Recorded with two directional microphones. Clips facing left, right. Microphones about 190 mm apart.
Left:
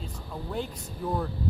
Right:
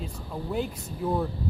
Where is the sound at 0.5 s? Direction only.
5° right (ahead or behind).